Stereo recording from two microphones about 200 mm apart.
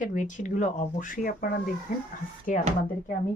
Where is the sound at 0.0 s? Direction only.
40° left (ahead or behind).